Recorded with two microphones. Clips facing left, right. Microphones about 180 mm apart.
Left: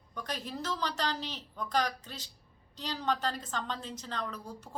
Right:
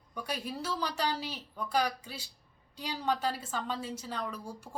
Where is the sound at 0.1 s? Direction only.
10° right (ahead or behind).